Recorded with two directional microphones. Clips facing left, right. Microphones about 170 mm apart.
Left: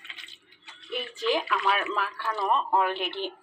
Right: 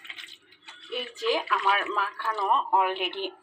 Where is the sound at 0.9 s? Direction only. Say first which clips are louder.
Even; 10° right (ahead or behind).